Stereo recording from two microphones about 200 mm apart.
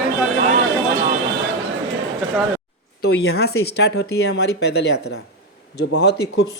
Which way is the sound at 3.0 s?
55° left (ahead or behind).